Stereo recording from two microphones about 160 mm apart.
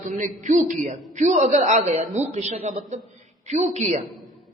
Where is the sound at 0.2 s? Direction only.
50° right (ahead or behind).